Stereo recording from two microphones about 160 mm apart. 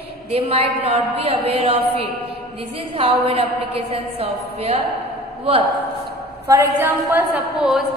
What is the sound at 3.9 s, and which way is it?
Speech, 40° right (ahead or behind).